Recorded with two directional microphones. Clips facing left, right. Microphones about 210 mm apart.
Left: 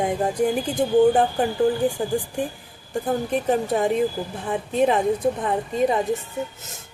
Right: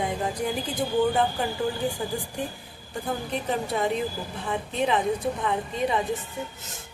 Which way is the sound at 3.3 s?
45° left (ahead or behind).